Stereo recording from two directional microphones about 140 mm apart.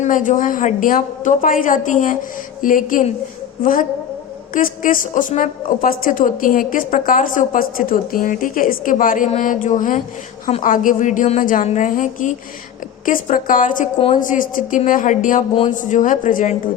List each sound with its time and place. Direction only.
0.0 s a woman's voice: 65° left (ahead or behind)
13.1 s a woman's voice: 75° left (ahead or behind); by 16.6 s 60° left (ahead or behind)